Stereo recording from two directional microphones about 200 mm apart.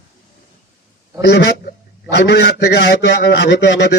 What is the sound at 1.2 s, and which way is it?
A man's voice, 55° left (ahead or behind).